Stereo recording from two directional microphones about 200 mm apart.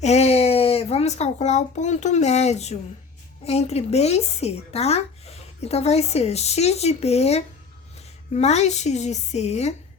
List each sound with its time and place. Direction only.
0.0 s a child's voice: 35° left (ahead or behind)